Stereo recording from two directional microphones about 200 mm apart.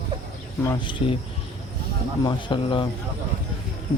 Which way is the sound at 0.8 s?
25° left (ahead or behind).